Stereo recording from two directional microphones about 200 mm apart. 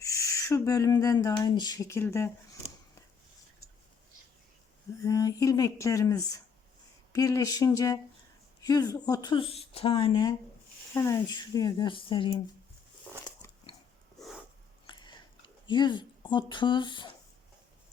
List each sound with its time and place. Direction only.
0.0 s speech: 15° left (ahead or behind)
5.0 s speech: 15° left (ahead or behind)
10.9 s speech: 15° left (ahead or behind)
13.2 s biting: 20° left (ahead or behind)
14.8 s a sound: 20° left (ahead or behind)